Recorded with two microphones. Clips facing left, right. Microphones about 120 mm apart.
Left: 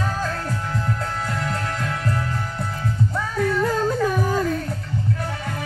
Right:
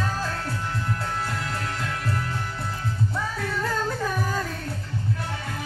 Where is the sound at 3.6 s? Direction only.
20° left (ahead or behind).